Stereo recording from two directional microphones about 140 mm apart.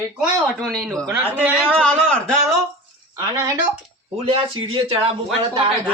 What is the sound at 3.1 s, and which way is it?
Speech, 25° right (ahead or behind).